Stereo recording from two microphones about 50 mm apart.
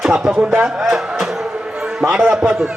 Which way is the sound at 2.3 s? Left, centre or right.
Centre.